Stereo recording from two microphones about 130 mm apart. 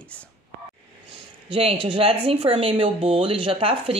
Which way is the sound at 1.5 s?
45° right (ahead or behind).